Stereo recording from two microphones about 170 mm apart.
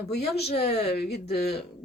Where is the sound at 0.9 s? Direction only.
70° left (ahead or behind).